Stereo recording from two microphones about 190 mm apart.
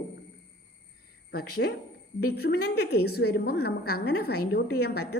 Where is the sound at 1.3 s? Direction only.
55° left (ahead or behind).